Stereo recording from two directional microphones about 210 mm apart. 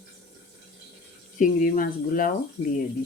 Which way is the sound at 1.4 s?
40° left (ahead or behind).